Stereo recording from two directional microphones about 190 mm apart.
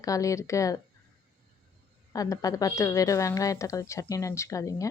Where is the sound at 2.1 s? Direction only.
20° left (ahead or behind).